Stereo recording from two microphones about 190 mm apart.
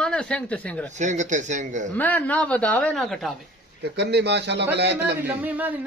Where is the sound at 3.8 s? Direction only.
60° right (ahead or behind).